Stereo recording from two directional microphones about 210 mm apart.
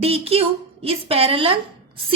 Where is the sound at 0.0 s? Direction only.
30° right (ahead or behind).